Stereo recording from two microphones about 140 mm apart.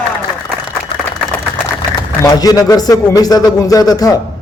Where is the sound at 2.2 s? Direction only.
25° left (ahead or behind).